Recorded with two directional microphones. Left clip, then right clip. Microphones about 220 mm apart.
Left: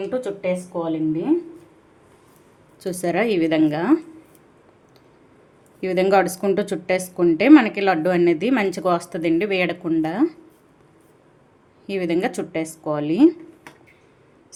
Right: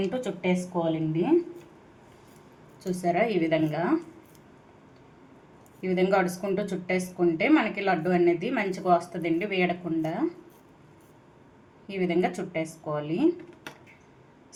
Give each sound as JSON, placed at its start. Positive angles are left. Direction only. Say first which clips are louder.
{"t": 0.1, "sound": "speech", "louder": "left 5 dB", "side_deg": 25}
{"t": 2.8, "sound": "a woman's voice", "louder": "left 4 dB", "side_deg": 50}
{"t": 5.8, "sound": "a woman's voice", "louder": "left 7 dB", "side_deg": 50}
{"t": 11.9, "sound": "a woman's voice", "louder": "left 4 dB", "side_deg": 50}